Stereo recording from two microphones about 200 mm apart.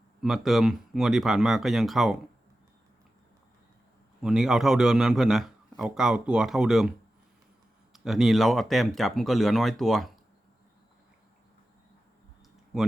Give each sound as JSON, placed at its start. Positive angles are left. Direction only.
{"t": 0.2, "sound": "a man's voice", "side_deg": 0}
{"t": 4.2, "sound": "a man's voice", "side_deg": -5}
{"t": 7.9, "sound": "a man's voice", "side_deg": 0}
{"t": 12.7, "sound": "a man's voice", "side_deg": 0}